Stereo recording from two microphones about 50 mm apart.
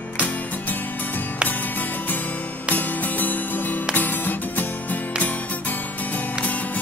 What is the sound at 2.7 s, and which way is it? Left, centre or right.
Music, left.